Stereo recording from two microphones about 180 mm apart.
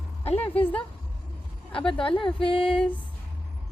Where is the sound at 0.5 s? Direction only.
30° left (ahead or behind).